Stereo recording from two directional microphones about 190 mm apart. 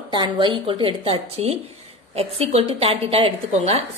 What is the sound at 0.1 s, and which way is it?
A woman's voice, 25° right (ahead or behind).